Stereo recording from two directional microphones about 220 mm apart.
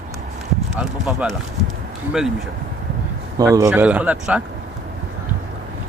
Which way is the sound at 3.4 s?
15° right (ahead or behind).